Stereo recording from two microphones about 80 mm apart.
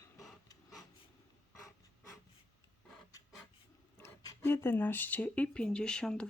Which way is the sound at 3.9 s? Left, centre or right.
Left.